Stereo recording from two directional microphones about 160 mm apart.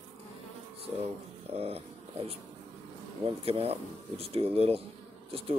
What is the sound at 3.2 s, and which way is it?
Speech, 35° right (ahead or behind).